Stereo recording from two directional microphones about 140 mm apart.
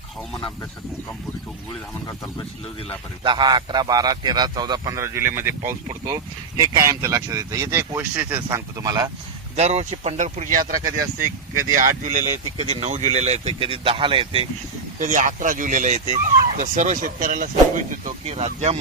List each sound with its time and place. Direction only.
3.2 s a man's voice: 30° right (ahead or behind); by 5.7 s 15° right (ahead or behind)
5.9 s a man's voice: 30° right (ahead or behind); by 8.4 s 10° right (ahead or behind)
8.4 s a man's voice: 25° right (ahead or behind)
9.6 s speech: 50° right (ahead or behind); by 12.2 s 65° right (ahead or behind)
12.5 s speech: 45° right (ahead or behind)
14.9 s speech: 65° right (ahead or behind)
18.3 s speech: 55° right (ahead or behind)